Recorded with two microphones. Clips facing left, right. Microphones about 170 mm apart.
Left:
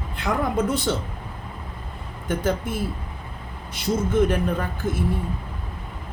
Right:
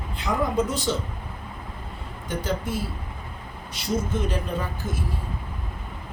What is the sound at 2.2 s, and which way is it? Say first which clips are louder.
Speech: left 4 dB; 50° left (ahead or behind).